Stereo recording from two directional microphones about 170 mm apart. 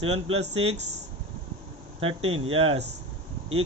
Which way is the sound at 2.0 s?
35° right (ahead or behind).